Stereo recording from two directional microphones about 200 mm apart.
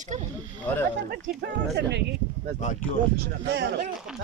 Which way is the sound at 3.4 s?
60° right (ahead or behind).